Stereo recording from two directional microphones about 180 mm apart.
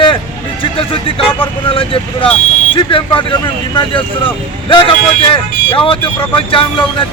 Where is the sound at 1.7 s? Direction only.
30° left (ahead or behind).